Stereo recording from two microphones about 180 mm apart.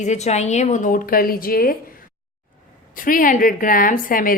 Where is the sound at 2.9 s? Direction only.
50° left (ahead or behind).